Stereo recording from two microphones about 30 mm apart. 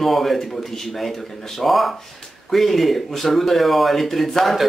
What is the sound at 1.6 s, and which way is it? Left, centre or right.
Speech, centre.